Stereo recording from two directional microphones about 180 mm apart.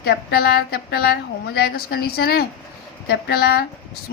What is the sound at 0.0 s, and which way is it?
Speech, 60° left (ahead or behind).